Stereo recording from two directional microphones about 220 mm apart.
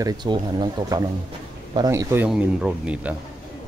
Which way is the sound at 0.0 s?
20° right (ahead or behind).